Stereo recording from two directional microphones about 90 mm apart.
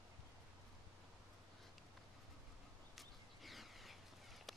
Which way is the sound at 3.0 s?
Centre (ahead or behind).